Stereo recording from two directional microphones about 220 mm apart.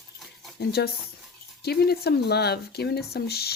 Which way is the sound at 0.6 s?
45° left (ahead or behind).